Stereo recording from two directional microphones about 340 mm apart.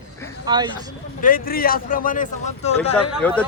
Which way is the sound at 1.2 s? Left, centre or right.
Left.